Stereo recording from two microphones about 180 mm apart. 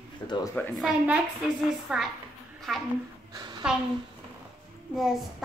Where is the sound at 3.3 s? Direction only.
20° right (ahead or behind).